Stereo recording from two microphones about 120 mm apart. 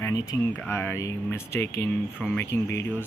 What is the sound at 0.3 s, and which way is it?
Speech, 25° left (ahead or behind).